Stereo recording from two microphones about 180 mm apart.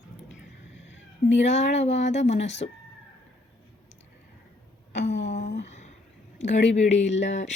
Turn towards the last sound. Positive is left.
turn(degrees=40)  # may be behind; listen again after turning